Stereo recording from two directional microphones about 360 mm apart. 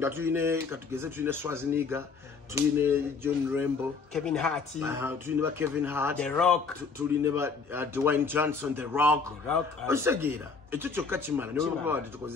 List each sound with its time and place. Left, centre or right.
0.0 s speech: centre
4.1 s speech: centre